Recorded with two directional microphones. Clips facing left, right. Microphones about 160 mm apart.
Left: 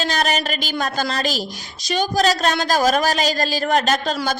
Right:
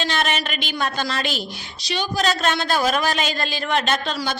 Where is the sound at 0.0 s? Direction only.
40° left (ahead or behind).